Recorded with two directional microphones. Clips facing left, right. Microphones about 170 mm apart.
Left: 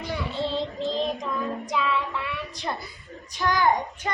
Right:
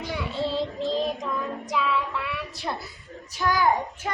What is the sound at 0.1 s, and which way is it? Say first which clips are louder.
Child singing: even; 5° right (ahead or behind).